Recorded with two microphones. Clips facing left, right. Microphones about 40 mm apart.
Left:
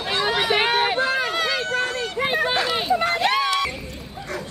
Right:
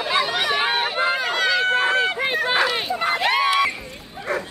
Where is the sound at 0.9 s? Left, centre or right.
Right.